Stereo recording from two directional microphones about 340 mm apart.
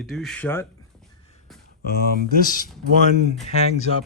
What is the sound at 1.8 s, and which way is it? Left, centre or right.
Speech, left.